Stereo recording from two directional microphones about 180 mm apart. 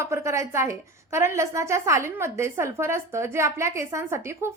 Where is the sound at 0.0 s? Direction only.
15° right (ahead or behind).